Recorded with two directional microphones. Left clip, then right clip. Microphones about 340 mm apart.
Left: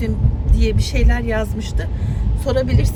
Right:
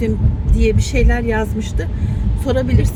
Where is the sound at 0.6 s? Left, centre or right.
Centre.